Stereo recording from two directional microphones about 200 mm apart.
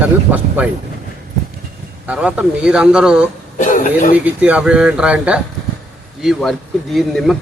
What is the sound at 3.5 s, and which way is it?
Throat clearing, 40° left (ahead or behind).